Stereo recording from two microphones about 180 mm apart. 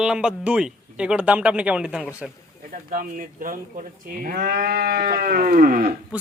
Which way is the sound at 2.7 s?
55° right (ahead or behind).